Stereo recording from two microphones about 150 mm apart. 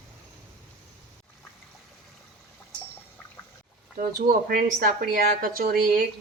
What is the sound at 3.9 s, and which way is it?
Speech, 80° right.